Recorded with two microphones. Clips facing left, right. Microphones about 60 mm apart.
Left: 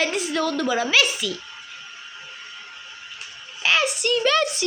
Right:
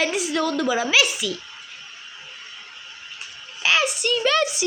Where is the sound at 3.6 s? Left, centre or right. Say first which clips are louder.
Even; centre.